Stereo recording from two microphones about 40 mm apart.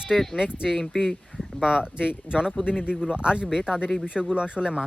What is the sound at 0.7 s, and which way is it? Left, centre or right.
Speech, centre.